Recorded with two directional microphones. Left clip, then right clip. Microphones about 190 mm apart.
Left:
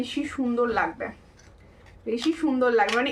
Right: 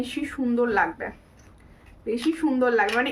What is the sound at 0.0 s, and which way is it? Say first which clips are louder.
Speech: even; 15° right (ahead or behind).